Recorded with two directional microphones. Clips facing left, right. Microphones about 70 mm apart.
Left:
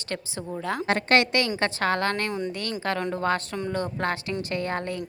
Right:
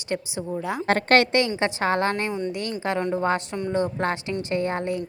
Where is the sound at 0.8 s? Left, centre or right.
Right.